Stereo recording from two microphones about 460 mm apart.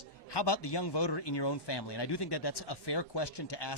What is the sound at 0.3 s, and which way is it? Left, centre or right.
Speech, left.